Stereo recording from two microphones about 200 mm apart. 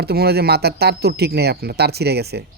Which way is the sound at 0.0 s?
50° right (ahead or behind).